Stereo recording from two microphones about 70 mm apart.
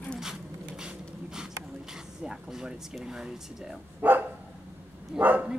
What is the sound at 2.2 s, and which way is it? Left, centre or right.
Speech, centre.